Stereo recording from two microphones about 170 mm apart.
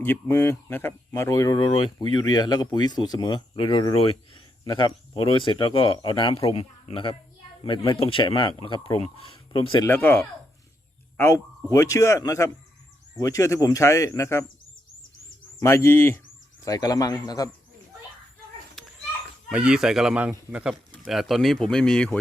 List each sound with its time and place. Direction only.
0.0 s a man's voice: 10° left (ahead or behind); by 9.8 s 30° left (ahead or behind)
9.8 s speech: 10° left (ahead or behind)
11.7 s speech: 20° left (ahead or behind)
15.6 s speech: 15° left (ahead or behind)
18.8 s children playing: centre (ahead or behind)
19.5 s speech: 5° right (ahead or behind)